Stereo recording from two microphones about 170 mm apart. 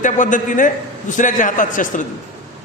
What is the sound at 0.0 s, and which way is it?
A man's voice, 50° left (ahead or behind).